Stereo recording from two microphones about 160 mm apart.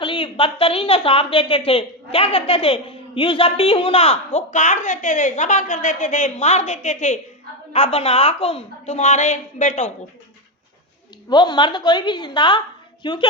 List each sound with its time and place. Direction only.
0.0 s a woman's voice: 35° left (ahead or behind); by 9.9 s 50° left (ahead or behind)
11.3 s a woman's voice: 30° left (ahead or behind)